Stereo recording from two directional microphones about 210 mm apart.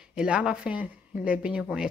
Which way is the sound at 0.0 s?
5° right (ahead or behind).